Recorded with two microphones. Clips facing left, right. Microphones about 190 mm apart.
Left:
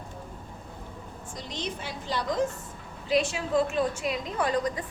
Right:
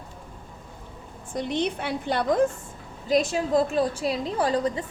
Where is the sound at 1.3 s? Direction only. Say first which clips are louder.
Right 10 dB; 60° right (ahead or behind).